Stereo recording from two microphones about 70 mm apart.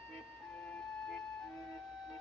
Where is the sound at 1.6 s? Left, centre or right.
Centre.